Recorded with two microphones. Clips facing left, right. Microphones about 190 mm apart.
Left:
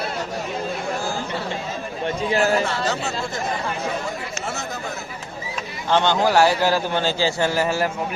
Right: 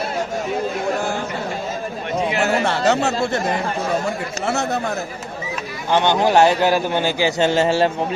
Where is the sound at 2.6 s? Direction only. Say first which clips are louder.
Right 6 dB; 70° right (ahead or behind).